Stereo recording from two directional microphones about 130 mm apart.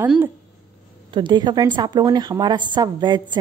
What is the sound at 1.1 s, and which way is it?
Speech, 35° right (ahead or behind).